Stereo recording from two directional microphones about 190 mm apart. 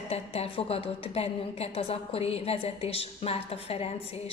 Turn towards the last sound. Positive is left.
turn(degrees=35)  # may be behind; listen again after turning